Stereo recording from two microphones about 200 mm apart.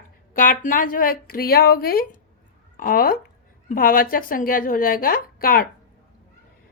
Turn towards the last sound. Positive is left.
turn(degrees=45)  # may be behind; listen again after turning